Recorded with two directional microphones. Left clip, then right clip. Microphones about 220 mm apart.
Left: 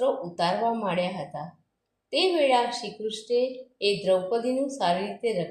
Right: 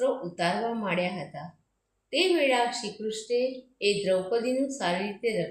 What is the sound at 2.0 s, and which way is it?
A woman's voice, 20° left (ahead or behind).